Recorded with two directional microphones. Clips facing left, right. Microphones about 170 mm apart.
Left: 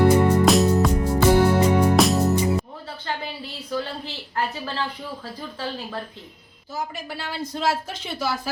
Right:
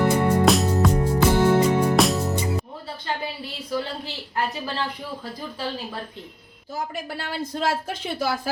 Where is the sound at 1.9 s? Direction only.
Centre (ahead or behind).